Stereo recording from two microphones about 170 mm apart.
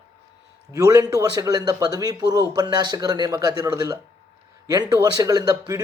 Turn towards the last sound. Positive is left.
turn(degrees=-20)  # may be behind; listen again after turning